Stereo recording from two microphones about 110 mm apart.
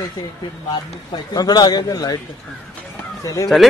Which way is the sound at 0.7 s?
40° left (ahead or behind).